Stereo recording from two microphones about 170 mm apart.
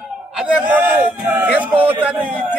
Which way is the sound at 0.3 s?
5° right (ahead or behind).